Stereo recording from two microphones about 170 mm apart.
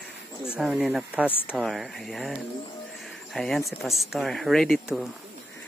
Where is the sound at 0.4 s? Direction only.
Centre (ahead or behind).